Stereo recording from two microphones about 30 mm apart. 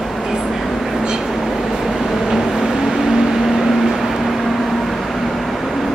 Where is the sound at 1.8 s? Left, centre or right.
Centre.